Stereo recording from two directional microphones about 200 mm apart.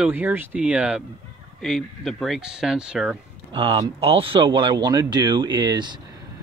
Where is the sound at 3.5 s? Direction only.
25° right (ahead or behind).